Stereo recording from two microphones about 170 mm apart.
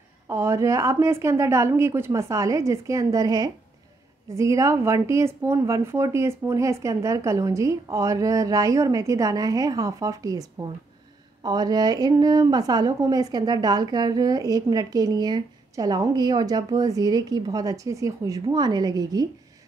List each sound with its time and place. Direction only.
0.3 s a woman's voice: 15° right (ahead or behind)